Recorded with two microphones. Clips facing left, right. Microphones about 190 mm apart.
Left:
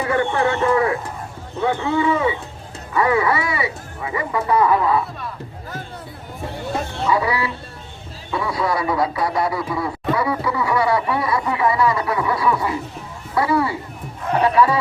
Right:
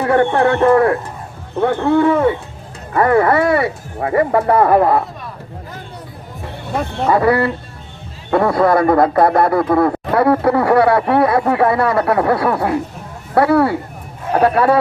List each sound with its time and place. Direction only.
0.0 s speech: 60° right (ahead or behind)
7.0 s speech: 55° right (ahead or behind)